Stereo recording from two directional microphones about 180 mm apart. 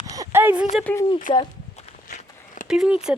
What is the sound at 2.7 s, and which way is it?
Speech, 5° right (ahead or behind).